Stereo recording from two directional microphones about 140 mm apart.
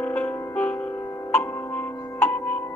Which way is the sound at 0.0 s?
10° left (ahead or behind).